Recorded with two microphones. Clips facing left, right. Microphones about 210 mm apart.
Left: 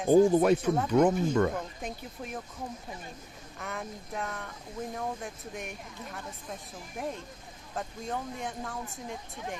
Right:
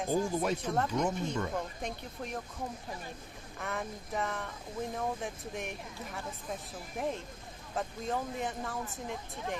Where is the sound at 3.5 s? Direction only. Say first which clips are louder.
Right 1 dB; centre (ahead or behind).